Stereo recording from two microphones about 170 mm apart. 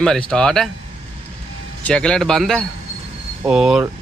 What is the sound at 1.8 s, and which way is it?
Speech, 5° left (ahead or behind).